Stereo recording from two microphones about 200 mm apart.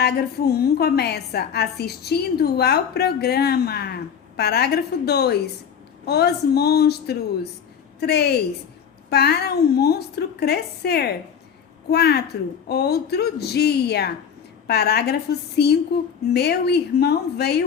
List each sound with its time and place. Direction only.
0.0 s a woman's voice: 55° left (ahead or behind)